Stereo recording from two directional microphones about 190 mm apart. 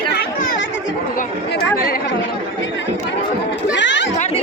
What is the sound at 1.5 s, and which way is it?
Chatter, 50° left (ahead or behind).